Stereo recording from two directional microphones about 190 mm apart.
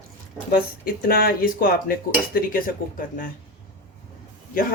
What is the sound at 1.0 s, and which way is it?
Speech, 50° left (ahead or behind).